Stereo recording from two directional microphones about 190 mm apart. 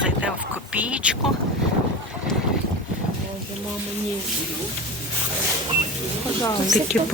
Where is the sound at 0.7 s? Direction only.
5° right (ahead or behind).